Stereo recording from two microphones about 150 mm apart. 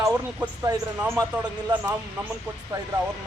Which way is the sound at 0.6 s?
20° right (ahead or behind).